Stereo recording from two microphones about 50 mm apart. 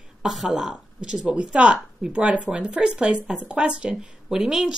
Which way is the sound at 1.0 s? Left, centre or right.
Centre.